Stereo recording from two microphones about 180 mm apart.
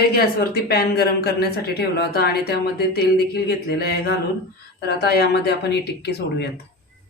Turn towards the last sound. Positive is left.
turn(degrees=65)  # may be behind; listen again after turning